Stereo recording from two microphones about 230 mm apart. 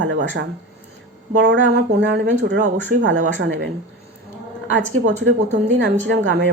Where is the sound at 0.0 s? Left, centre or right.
Right.